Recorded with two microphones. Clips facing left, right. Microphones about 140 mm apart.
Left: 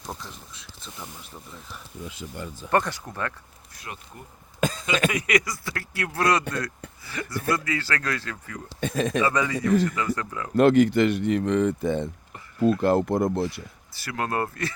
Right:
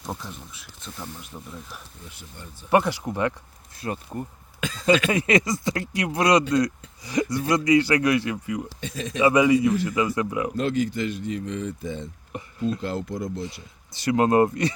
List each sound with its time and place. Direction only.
0.0 s speech: 5° right (ahead or behind)
2.0 s speech: 90° left
2.6 s a man's voice: 10° right (ahead or behind)
3.8 s speech: 35° right (ahead or behind)
4.6 s speech: 45° left (ahead or behind)
5.1 s a man's voice: 25° right (ahead or behind)
8.8 s speech: 55° left (ahead or behind)
9.2 s a man's voice: 15° right (ahead or behind)
10.5 s speech: 60° left (ahead or behind)
13.6 s speech: 20° right (ahead or behind)